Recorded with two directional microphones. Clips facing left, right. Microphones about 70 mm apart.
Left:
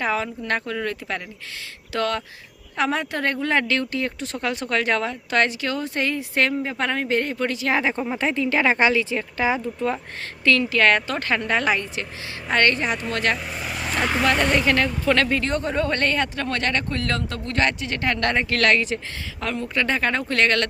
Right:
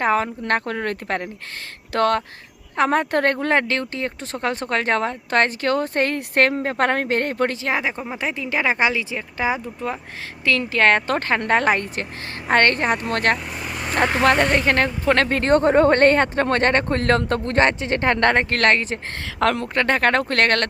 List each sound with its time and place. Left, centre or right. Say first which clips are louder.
0.0 s a woman's voice: right 4 dB; right
3.3 s speech: right 2 dB; right
7.8 s speech: left 2 dB; centre
10.6 s a woman's voice: right 5 dB; right
13.7 s vehicle: right 1 dB; centre
14.2 s speech: right 2 dB; right
19.2 s a woman's voice: right 8 dB; right
19.6 s a woman's voice: right 4 dB; right